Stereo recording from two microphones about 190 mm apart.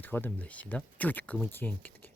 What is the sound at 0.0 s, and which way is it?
Speech, 10° left (ahead or behind).